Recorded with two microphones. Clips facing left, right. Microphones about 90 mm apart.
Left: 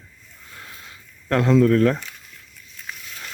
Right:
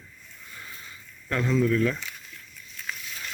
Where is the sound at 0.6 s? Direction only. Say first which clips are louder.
Left 2 dB; 65° left (ahead or behind).